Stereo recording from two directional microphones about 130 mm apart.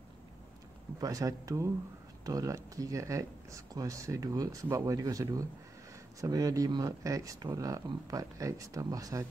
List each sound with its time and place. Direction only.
1.0 s speech: 25° right (ahead or behind)